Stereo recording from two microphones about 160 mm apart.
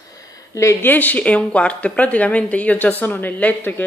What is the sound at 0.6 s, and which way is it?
A woman's voice, 15° left (ahead or behind).